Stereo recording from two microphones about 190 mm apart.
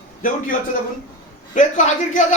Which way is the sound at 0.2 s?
45° left (ahead or behind).